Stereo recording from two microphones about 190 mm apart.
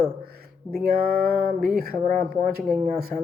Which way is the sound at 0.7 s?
50° right (ahead or behind).